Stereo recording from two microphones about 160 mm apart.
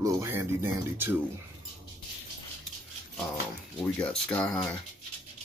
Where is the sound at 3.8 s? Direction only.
10° left (ahead or behind).